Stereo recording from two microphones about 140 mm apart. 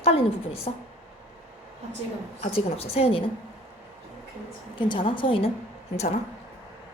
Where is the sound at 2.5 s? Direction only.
45° left (ahead or behind).